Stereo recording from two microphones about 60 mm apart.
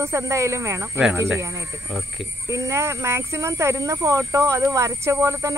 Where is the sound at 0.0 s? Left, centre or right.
Right.